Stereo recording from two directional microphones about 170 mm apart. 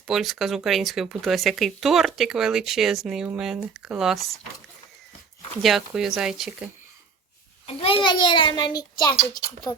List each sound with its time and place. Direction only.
0.1 s speech: centre (ahead or behind)
5.6 s speech: centre (ahead or behind)
7.8 s a child's voice: 30° left (ahead or behind)